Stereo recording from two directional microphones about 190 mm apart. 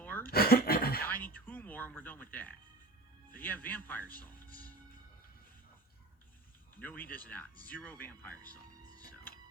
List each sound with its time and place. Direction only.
0.0 s a sound: 10° left (ahead or behind)
0.3 s speech: 55° left (ahead or behind)
1.0 s speech: 10° left (ahead or behind)
6.7 s speech: 10° left (ahead or behind)